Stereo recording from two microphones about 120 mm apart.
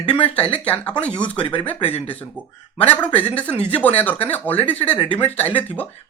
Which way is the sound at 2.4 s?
10° right (ahead or behind).